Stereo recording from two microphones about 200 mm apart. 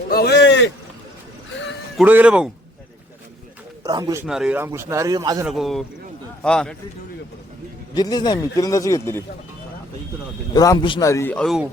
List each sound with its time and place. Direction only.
0.1 s a sound: 50° left (ahead or behind)
2.0 s speech: 5° right (ahead or behind)
3.8 s speech: 20° right (ahead or behind)
4.3 s speech: 5° right (ahead or behind); by 5.5 s 20° right (ahead or behind)
5.5 s speech: centre (ahead or behind)
7.9 s a man's voice: 20° left (ahead or behind)
10.5 s a man's voice: 20° left (ahead or behind); by 11.6 s 5° left (ahead or behind)